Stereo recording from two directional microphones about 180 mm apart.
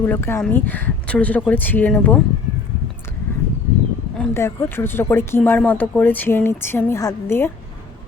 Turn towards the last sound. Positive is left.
turn(degrees=15)  # may be behind; listen again after turning